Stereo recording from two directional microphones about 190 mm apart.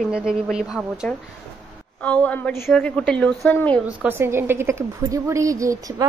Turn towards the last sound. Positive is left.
turn(degrees=-15)  # may be behind; listen again after turning